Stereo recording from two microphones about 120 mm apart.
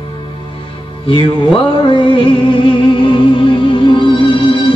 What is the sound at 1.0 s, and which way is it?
Music, 50° left (ahead or behind).